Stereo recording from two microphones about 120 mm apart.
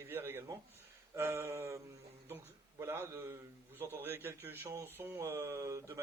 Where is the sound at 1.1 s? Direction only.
20° right (ahead or behind).